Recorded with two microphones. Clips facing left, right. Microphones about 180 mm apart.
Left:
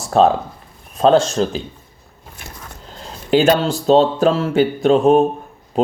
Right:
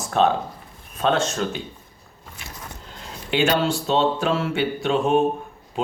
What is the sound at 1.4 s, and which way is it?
Mantra, 35° left (ahead or behind).